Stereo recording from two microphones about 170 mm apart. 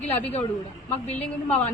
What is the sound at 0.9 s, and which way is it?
Speech, 40° left (ahead or behind).